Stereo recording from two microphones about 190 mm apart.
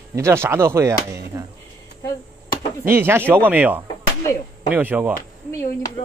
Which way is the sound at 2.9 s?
10° right (ahead or behind).